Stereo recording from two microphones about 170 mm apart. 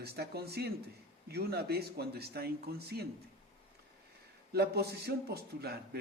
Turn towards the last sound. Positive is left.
turn(degrees=-70)  # may be behind; listen again after turning